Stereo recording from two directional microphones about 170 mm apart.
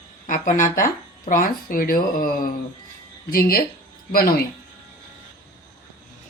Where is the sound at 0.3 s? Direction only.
50° left (ahead or behind).